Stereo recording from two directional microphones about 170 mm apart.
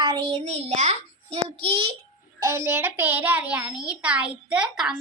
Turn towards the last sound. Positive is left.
turn(degrees=-5)  # may be behind; listen again after turning